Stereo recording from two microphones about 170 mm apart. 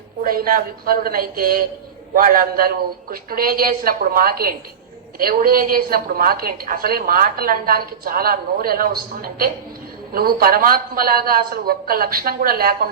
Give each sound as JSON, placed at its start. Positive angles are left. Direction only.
{"t": 0.2, "sound": "a woman's voice", "side_deg": -55}